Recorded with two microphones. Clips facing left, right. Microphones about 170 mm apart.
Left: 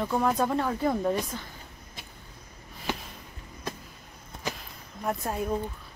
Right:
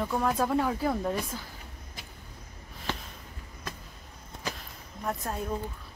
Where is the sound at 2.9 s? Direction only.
10° left (ahead or behind).